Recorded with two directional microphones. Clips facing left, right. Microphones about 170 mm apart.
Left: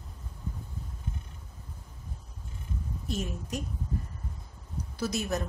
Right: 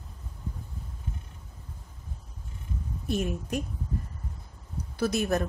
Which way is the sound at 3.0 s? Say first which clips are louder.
Right 6 dB; 60° right (ahead or behind).